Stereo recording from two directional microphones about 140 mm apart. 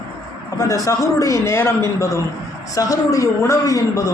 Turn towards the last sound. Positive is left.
turn(degrees=25)  # may be behind; listen again after turning